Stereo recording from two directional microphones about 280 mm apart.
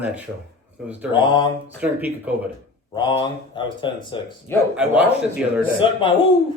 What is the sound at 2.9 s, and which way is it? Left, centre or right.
Speech, centre.